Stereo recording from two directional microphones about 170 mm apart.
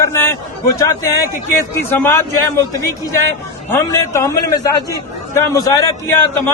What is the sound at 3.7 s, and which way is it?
A man's voice, 15° left (ahead or behind).